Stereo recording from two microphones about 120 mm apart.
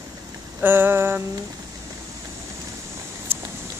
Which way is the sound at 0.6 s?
15° right (ahead or behind).